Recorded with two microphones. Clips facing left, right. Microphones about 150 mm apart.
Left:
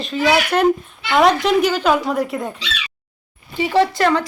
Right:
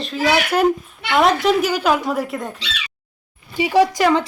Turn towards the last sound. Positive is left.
turn(degrees=-15)  # may be behind; listen again after turning